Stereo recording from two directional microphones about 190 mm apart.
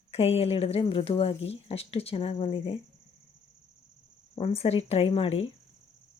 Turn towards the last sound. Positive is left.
turn(degrees=30)  # may be behind; listen again after turning